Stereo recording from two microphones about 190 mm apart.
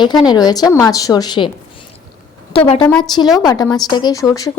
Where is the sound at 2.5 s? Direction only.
30° left (ahead or behind).